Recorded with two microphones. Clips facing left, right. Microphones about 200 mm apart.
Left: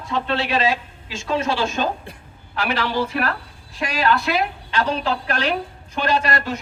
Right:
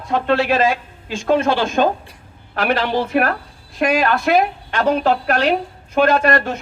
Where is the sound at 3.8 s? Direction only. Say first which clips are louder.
Right 4 dB; 55° right (ahead or behind).